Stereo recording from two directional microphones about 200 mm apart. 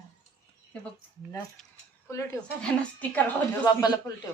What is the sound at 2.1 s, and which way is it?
A woman's voice, 15° left (ahead or behind).